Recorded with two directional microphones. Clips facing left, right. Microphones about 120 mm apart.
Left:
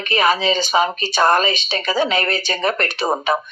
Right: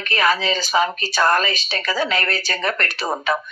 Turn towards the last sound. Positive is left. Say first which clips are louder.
# left 3 dB
turn(degrees=20)  # may be behind; listen again after turning